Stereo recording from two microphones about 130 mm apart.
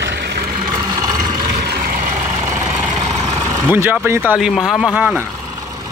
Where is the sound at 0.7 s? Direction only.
30° right (ahead or behind).